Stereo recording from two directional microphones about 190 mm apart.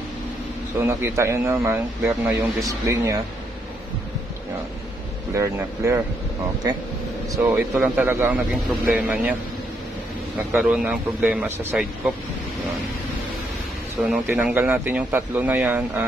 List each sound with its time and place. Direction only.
0.7 s speech: 15° right (ahead or behind)
5.3 s speech: 15° right (ahead or behind)
7.4 s speech: 5° right (ahead or behind)
10.5 s speech: 5° right (ahead or behind)
14.0 s speech: 5° right (ahead or behind)